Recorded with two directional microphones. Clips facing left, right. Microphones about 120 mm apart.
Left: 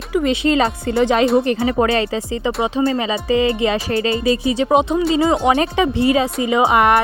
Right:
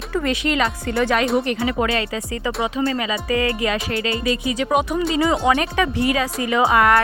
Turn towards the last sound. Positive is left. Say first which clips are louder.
# left 2 dB
turn(degrees=20)  # may be behind; listen again after turning